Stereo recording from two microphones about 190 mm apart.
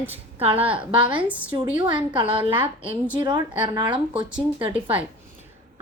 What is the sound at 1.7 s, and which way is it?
A woman's voice, 25° right (ahead or behind).